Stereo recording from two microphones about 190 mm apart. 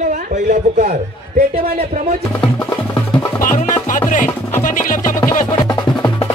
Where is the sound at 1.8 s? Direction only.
35° right (ahead or behind).